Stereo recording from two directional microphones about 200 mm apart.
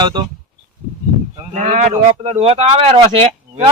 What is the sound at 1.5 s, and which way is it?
A man's voice, 40° right (ahead or behind).